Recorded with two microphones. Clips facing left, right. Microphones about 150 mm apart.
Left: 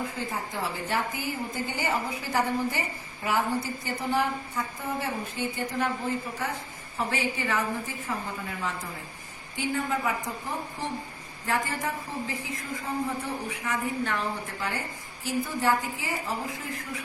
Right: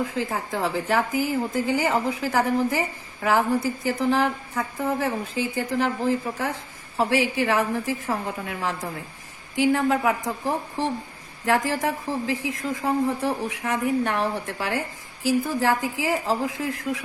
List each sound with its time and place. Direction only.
0.0 s a woman's voice: 90° right
3.8 s a woman's voice: 90° right
6.9 s a woman's voice: 80° right
9.6 s a woman's voice: 85° right
15.2 s a woman's voice: 90° right